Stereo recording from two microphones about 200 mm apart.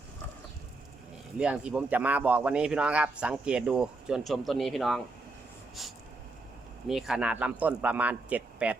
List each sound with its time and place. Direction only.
1.4 s speech: 5° right (ahead or behind)
6.8 s speech: centre (ahead or behind)